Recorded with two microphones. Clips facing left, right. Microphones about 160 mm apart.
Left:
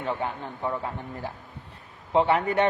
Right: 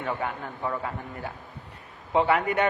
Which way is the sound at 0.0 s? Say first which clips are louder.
Left 1 dB; 25° left (ahead or behind).